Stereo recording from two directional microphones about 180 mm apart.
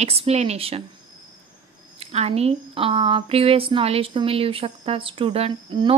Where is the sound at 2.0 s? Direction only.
35° right (ahead or behind).